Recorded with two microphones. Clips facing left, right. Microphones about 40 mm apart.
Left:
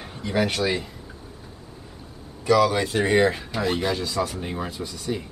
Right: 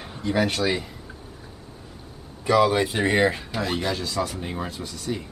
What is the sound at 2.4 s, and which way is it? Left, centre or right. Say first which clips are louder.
Speech: even; centre.